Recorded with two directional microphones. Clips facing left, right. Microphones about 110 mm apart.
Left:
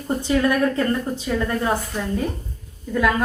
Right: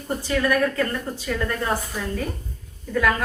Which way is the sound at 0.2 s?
20° left (ahead or behind).